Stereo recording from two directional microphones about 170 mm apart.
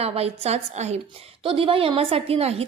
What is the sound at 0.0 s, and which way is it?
A woman's voice, 35° right (ahead or behind).